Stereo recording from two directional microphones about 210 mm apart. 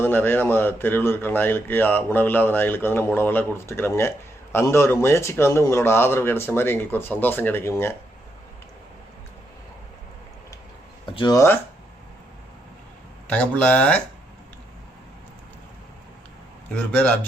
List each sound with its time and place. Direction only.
0.0 s speech: 10° left (ahead or behind)
11.0 s speech: 20° left (ahead or behind)
13.2 s speech: 5° left (ahead or behind)
16.7 s speech: 5° left (ahead or behind)